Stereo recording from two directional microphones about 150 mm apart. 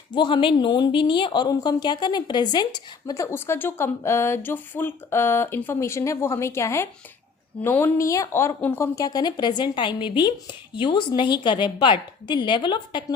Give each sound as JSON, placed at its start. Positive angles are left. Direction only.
{"t": 0.1, "sound": "a woman's voice", "side_deg": 30}